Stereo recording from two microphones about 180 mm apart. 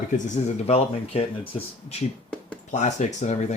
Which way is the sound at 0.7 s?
35° left (ahead or behind).